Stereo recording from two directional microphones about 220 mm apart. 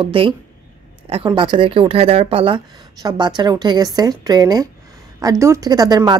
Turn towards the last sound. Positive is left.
turn(degrees=-15)  # may be behind; listen again after turning